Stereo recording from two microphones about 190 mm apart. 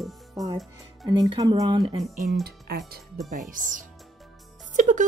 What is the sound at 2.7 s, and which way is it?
Speech, 60° right (ahead or behind).